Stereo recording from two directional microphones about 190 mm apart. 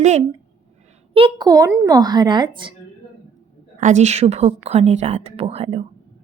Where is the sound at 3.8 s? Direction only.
40° right (ahead or behind).